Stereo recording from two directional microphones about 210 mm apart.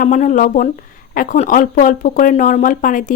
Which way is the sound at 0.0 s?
40° left (ahead or behind).